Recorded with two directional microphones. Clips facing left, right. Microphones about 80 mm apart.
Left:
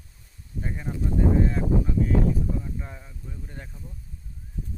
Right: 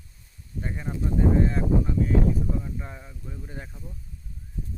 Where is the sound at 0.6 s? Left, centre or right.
Centre.